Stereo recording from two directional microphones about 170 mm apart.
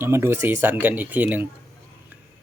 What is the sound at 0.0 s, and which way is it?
Speech, 15° right (ahead or behind).